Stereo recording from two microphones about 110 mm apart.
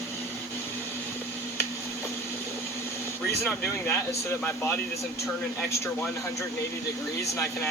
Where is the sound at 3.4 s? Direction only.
25° left (ahead or behind).